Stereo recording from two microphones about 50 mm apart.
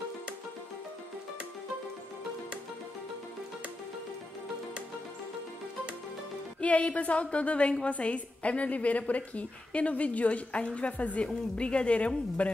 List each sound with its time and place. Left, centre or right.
6.6 s a woman's voice: left